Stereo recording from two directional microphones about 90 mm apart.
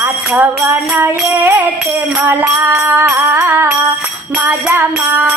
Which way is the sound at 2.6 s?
35° right (ahead or behind).